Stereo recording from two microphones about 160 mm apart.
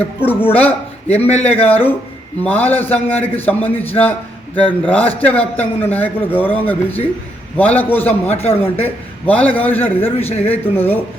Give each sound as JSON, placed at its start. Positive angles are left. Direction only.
{"t": 0.2, "sound": "a man's voice", "side_deg": 15}
{"t": 1.0, "sound": "speech", "side_deg": 40}
{"t": 1.6, "sound": "a man's voice", "side_deg": 10}
{"t": 8.3, "sound": "speech", "side_deg": 40}
{"t": 8.8, "sound": "a man's voice", "side_deg": 10}
{"t": 10.2, "sound": "speech", "side_deg": 40}
{"t": 10.8, "sound": "a man's voice", "side_deg": 15}